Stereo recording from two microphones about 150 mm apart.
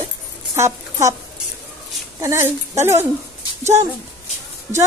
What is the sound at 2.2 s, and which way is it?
Speech, 20° right (ahead or behind).